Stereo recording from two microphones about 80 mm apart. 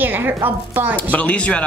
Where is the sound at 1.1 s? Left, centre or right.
Centre.